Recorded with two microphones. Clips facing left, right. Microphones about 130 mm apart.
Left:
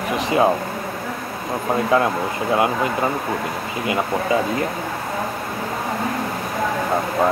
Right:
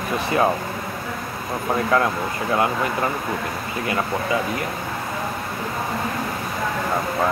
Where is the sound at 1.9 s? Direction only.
20° left (ahead or behind).